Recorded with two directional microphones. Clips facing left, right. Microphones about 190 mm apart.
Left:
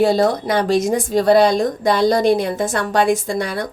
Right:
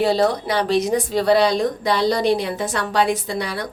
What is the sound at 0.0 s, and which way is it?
A woman's voice, 45° left (ahead or behind).